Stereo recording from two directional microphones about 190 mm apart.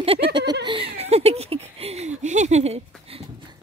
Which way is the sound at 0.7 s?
30° right (ahead or behind).